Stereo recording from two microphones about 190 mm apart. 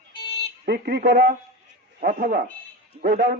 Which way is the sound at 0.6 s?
60° right (ahead or behind).